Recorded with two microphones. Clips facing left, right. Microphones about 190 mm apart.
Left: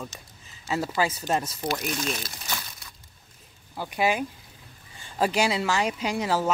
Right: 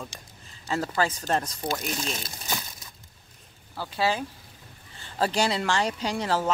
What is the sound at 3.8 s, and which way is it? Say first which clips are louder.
Speech: left 2 dB; 15° left (ahead or behind).